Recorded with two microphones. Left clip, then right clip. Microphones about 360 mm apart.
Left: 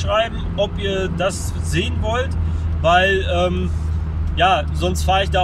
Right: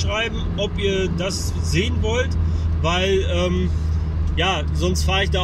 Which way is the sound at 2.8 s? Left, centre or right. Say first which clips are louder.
Left 5 dB; left.